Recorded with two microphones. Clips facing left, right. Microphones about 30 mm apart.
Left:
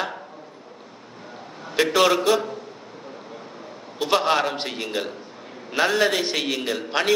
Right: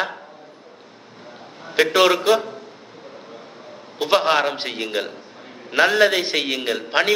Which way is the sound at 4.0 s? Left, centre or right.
Centre.